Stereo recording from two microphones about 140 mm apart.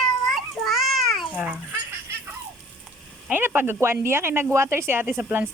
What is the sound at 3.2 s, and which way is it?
A woman's voice, 15° right (ahead or behind).